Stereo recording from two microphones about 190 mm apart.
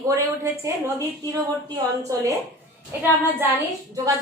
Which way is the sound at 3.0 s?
10° right (ahead or behind).